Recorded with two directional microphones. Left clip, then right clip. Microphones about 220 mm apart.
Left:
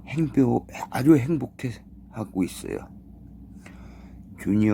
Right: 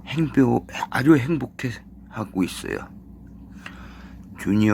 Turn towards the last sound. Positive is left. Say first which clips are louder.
# right 2 dB
turn(degrees=0)  # may be behind; listen again after turning